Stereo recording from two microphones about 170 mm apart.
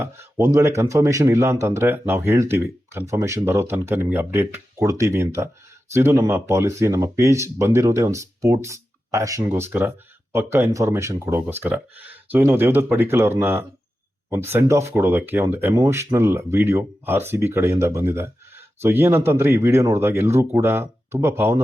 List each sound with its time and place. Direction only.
0.0 s speech: 15° right (ahead or behind)